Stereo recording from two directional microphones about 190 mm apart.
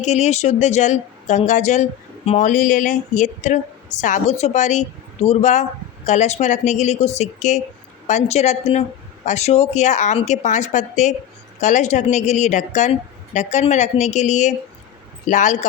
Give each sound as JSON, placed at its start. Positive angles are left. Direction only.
{"t": 0.0, "sound": "a woman's voice", "side_deg": 35}